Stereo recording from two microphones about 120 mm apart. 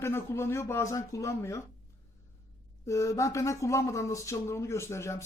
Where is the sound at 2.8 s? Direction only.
25° left (ahead or behind).